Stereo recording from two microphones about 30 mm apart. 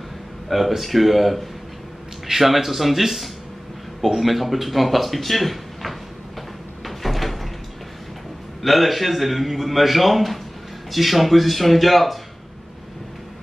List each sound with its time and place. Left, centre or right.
0.5 s speech: centre
6.8 s cupboard open or close: centre
8.6 s speech: centre